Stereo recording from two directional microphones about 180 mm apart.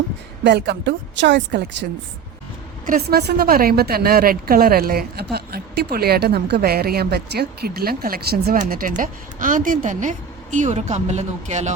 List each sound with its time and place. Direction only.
0.4 s a woman's voice: 70° right (ahead or behind)
2.8 s a woman's voice: 55° right (ahead or behind)
8.5 s speech: 45° right (ahead or behind)